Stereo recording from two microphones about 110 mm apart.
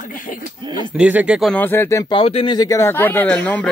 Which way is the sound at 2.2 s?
65° left (ahead or behind).